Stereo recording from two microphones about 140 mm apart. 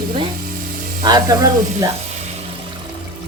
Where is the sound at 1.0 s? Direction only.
30° right (ahead or behind).